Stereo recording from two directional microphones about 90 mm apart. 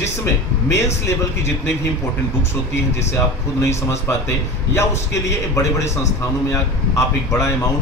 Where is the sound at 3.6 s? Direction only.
35° left (ahead or behind).